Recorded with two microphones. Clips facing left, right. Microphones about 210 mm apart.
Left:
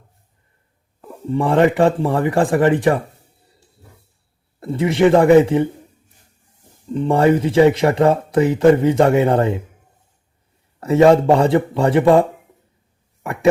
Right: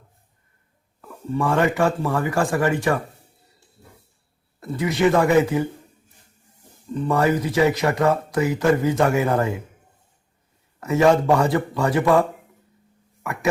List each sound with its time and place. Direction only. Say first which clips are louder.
1.0 s speech: left 4 dB; 30° left (ahead or behind)
4.6 s speech: left 5 dB; 25° left (ahead or behind)
6.8 s speech: left 5 dB; 25° left (ahead or behind)
10.8 s speech: left 5 dB; 30° left (ahead or behind)
13.2 s a sound: left 7 dB; 30° left (ahead or behind)